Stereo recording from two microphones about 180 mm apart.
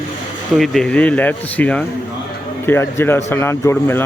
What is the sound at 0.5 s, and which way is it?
Speech, centre (ahead or behind).